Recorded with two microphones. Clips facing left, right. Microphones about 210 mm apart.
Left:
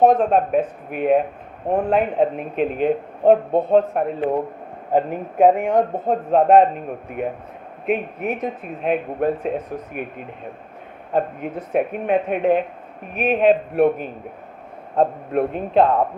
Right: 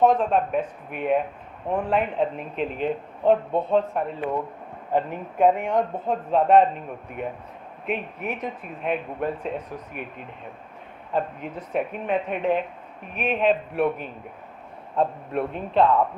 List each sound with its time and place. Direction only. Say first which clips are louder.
0.0 s a man's voice: left 4 dB; 45° left (ahead or behind)
1.7 s a man's voice: left 5 dB; 40° left (ahead or behind)
4.2 s a man's voice: left 6 dB; 35° left (ahead or behind)
7.9 s a man's voice: left 7 dB; 45° left (ahead or behind)
11.1 s a man's voice: left 5 dB; 50° left (ahead or behind)